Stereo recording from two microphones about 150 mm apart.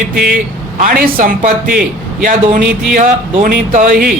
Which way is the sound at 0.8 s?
70° right (ahead or behind).